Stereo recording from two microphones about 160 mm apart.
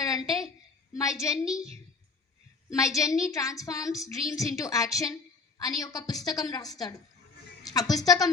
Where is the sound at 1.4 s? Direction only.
5° right (ahead or behind).